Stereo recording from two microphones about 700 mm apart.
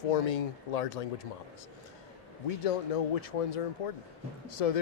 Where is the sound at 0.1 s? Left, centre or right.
Left.